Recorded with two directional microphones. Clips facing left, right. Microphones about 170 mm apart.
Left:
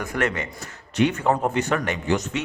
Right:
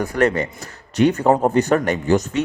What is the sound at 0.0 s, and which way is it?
A man's voice, 35° right (ahead or behind).